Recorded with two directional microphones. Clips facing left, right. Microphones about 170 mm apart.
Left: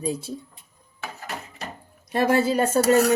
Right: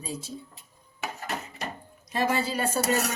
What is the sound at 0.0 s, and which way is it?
Speech, 60° left (ahead or behind).